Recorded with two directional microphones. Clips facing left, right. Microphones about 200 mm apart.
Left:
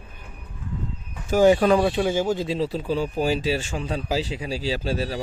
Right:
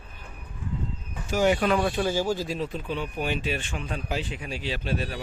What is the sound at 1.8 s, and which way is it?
Speech, 20° left (ahead or behind).